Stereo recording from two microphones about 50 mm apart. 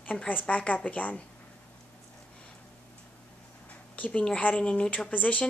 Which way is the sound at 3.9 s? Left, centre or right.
Left.